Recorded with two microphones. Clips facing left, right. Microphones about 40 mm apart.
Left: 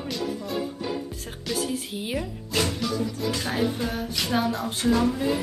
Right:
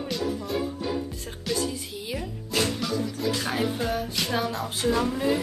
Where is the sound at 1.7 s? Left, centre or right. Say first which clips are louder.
Left 3 dB; left.